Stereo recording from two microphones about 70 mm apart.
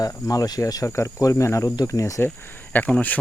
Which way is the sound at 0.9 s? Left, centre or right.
Left.